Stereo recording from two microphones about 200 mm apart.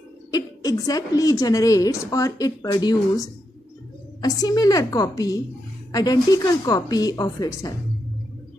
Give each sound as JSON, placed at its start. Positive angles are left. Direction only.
{"t": 0.3, "sound": "a woman's voice", "side_deg": 15}